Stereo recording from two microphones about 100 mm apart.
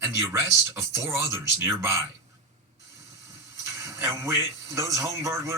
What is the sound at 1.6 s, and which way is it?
Speech, 25° right (ahead or behind).